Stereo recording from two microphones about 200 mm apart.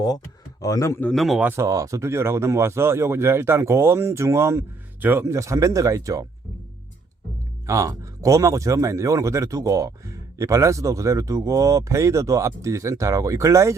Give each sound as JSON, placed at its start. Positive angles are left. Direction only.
{"t": 0.6, "sound": "speech", "side_deg": 15}
{"t": 7.7, "sound": "speech", "side_deg": -15}